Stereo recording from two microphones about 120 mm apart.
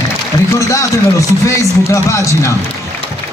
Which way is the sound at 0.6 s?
25° left (ahead or behind).